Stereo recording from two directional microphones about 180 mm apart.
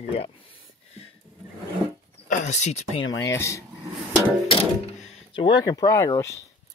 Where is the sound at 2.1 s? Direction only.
45° left (ahead or behind).